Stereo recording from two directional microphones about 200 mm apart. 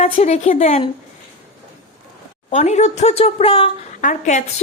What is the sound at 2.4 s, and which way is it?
A woman's voice, 35° left (ahead or behind).